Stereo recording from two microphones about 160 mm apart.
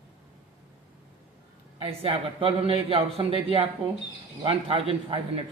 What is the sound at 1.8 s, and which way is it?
A man's voice, 35° right (ahead or behind).